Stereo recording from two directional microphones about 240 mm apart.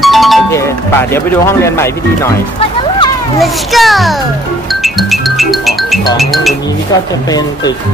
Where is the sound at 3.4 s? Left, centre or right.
Centre.